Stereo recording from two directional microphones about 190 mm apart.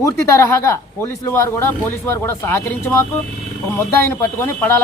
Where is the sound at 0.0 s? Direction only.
15° left (ahead or behind).